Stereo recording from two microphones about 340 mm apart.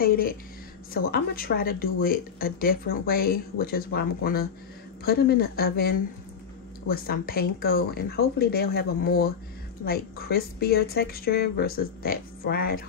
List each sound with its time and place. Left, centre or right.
0.0 s speech: left